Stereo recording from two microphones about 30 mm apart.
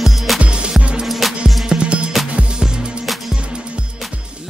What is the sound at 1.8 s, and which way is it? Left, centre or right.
Music, right.